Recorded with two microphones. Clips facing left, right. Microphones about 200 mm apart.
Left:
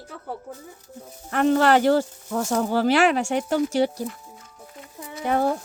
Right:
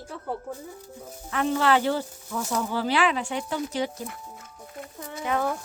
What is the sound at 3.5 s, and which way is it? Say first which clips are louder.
Speech: left 8 dB; 45° left (ahead or behind).